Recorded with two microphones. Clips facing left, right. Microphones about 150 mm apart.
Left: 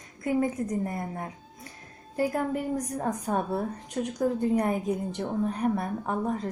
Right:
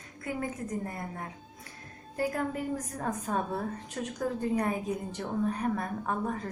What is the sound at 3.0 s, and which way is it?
Speech, 15° left (ahead or behind).